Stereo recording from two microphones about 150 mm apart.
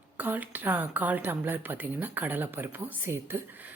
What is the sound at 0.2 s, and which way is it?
A woman's voice, 10° right (ahead or behind).